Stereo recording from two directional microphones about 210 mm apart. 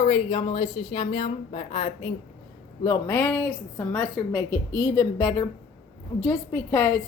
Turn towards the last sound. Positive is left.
turn(degrees=10)  # may be behind; listen again after turning